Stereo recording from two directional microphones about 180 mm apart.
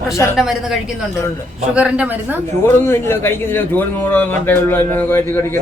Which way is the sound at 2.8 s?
15° left (ahead or behind).